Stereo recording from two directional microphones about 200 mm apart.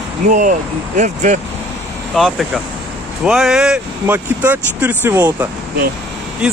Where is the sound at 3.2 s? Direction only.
Centre (ahead or behind).